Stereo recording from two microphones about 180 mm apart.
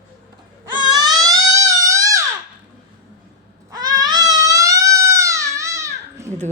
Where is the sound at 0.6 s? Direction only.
20° right (ahead or behind).